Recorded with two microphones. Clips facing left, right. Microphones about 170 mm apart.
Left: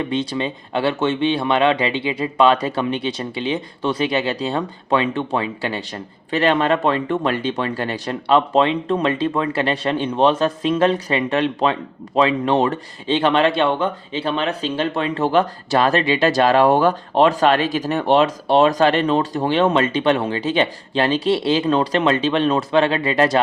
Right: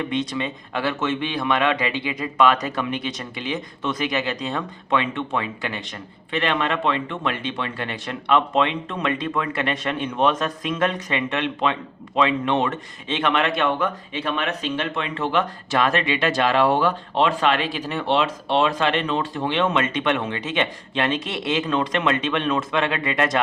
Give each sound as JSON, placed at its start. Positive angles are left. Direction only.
{"t": 0.0, "sound": "speech", "side_deg": 30}